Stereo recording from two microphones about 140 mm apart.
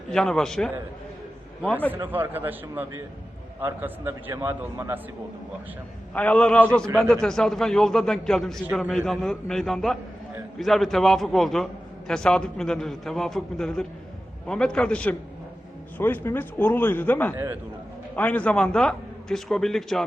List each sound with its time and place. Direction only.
0.1 s a man's voice: 5° left (ahead or behind)
1.9 s a man's voice: 15° right (ahead or behind)
6.1 s a man's voice: 10° left (ahead or behind)
17.3 s a man's voice: 15° right (ahead or behind)
18.2 s a man's voice: 10° left (ahead or behind)